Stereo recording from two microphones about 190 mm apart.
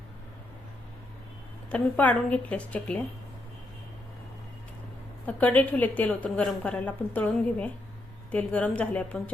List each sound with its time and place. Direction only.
1.7 s a woman's voice: 10° left (ahead or behind)
5.2 s a woman's voice: 10° left (ahead or behind)